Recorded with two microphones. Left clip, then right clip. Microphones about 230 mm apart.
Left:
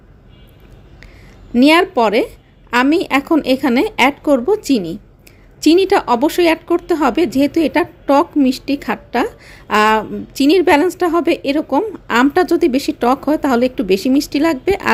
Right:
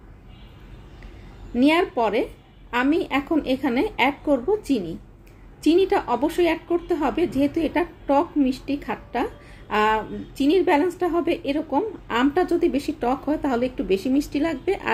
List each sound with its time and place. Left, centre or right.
1.5 s speech: left